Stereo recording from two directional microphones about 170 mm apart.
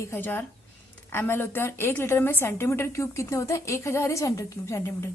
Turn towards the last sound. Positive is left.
turn(degrees=15)  # may be behind; listen again after turning